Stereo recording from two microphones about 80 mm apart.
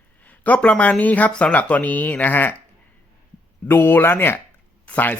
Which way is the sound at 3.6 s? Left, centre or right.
Left.